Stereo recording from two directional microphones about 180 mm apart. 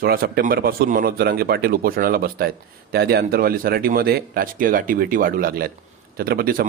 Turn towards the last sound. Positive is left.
turn(degrees=-55)  # may be behind; listen again after turning